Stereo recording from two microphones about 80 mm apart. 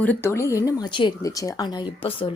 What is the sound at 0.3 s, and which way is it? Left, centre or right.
Speech, left.